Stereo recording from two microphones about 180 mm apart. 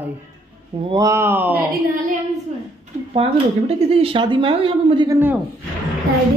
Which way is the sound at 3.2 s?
30° right (ahead or behind).